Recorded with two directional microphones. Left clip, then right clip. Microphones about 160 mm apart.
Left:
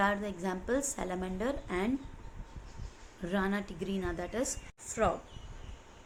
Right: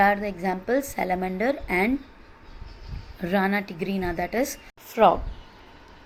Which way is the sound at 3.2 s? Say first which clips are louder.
Right 10 dB; 35° right (ahead or behind).